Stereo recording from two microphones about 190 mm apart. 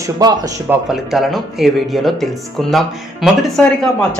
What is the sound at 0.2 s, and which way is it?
Speech, 20° right (ahead or behind).